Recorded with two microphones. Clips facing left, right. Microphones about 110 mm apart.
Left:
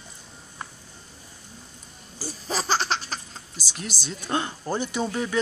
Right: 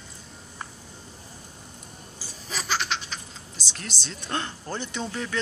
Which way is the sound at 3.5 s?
5° left (ahead or behind).